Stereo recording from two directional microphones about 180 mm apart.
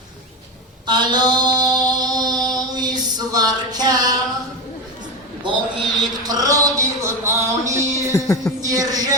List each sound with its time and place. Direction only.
0.9 s mantra: 25° right (ahead or behind)
5.4 s a sound: 25° right (ahead or behind)
8.1 s music: 15° left (ahead or behind)
8.6 s music: 20° right (ahead or behind)